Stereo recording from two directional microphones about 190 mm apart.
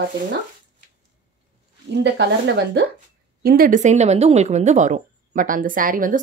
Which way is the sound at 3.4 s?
55° right (ahead or behind).